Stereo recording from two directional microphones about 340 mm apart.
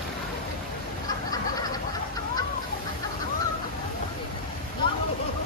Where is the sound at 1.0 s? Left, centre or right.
Centre.